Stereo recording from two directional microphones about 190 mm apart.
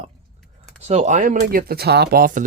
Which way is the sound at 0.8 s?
35° right (ahead or behind).